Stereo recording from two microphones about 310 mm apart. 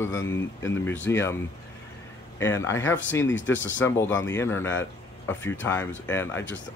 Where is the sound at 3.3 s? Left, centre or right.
Left.